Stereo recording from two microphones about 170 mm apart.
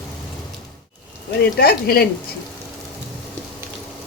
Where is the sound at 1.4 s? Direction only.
60° left (ahead or behind).